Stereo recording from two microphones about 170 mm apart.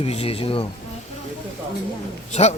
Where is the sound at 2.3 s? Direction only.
40° left (ahead or behind).